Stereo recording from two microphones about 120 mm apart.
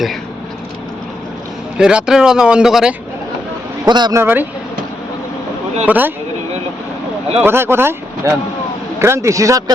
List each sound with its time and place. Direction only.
1.8 s speech: 5° right (ahead or behind)
3.8 s speech: 35° right (ahead or behind)
4.1 s speech: 20° right (ahead or behind)
5.8 s speech: 15° right (ahead or behind)
7.4 s speech: 20° right (ahead or behind)